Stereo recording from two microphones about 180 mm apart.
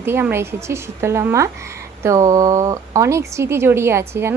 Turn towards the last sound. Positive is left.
turn(degrees=-15)  # may be behind; listen again after turning